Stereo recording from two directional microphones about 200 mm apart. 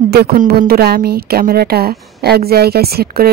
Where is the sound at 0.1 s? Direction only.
50° right (ahead or behind).